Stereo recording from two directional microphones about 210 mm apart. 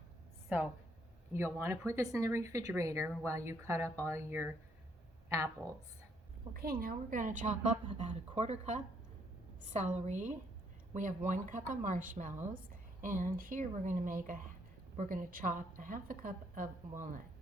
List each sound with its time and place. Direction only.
0.4 s a woman's voice: 5° right (ahead or behind)
6.5 s a woman's voice: 45° right (ahead or behind)